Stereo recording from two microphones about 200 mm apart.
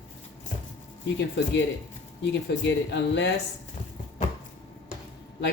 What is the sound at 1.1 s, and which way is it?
Speech, 60° left (ahead or behind).